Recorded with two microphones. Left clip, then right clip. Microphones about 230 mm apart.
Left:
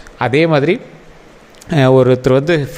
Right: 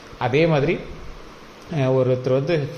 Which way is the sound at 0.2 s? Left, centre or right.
Left.